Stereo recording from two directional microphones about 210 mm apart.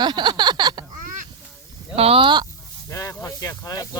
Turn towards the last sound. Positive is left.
turn(degrees=15)  # may be behind; listen again after turning